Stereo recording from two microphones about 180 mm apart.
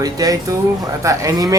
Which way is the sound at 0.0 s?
20° right (ahead or behind).